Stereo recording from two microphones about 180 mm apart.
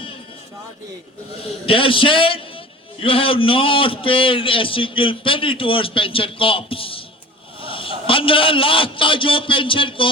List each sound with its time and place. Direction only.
1.6 s a man's voice: 30° left (ahead or behind)